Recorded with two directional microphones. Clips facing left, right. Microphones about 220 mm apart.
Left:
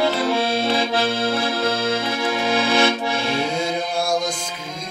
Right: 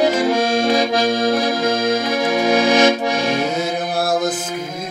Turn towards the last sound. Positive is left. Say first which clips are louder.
# right 3 dB
turn(degrees=-5)  # may be behind; listen again after turning